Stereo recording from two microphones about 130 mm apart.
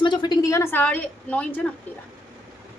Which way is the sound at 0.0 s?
35° left (ahead or behind).